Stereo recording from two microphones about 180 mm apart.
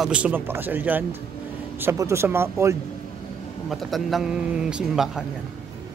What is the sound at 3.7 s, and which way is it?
A man's voice, centre (ahead or behind).